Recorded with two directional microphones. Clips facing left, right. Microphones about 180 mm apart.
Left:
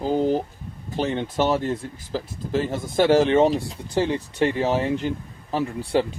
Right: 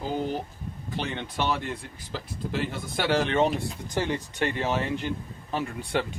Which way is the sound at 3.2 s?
30° left (ahead or behind).